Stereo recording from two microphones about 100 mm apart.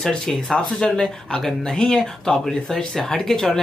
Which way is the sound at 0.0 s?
5° left (ahead or behind).